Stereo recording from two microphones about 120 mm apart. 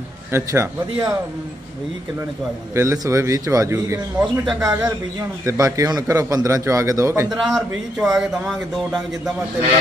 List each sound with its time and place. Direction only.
0.3 s a man's voice: 20° right (ahead or behind)
2.7 s a man's voice: 25° right (ahead or behind)
4.2 s speech: 5° right (ahead or behind)
4.6 s a man's voice: 30° right (ahead or behind)
7.4 s speech: 5° right (ahead or behind)